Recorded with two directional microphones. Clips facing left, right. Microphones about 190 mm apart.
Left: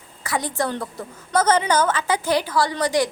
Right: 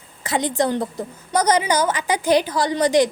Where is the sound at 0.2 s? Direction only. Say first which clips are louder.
Right 4 dB; 20° right (ahead or behind).